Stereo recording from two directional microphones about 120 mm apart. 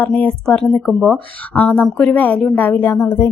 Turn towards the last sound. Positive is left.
turn(degrees=20)  # may be behind; listen again after turning